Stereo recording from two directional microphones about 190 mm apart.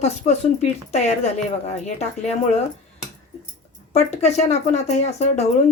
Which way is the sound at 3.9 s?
35° left (ahead or behind).